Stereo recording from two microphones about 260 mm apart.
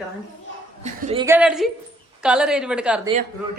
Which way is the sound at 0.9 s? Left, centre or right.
Right.